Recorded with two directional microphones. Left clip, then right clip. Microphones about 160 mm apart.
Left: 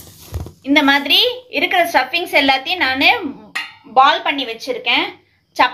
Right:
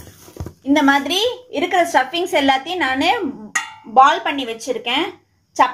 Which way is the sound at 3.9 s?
45° right (ahead or behind).